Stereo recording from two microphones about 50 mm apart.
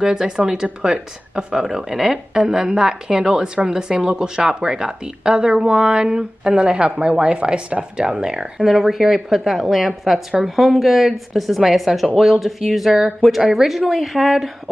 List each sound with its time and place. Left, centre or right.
0.0 s speech: centre
8.6 s speech: centre